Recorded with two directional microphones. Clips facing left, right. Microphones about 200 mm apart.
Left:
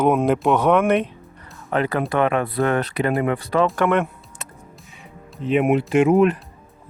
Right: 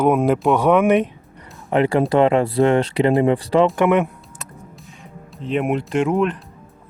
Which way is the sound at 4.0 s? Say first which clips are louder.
Right 3 dB; centre (ahead or behind).